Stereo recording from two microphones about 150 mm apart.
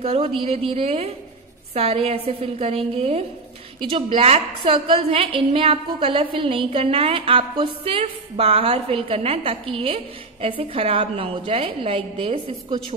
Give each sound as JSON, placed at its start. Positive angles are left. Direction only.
{"t": 0.0, "sound": "a woman's voice", "side_deg": -45}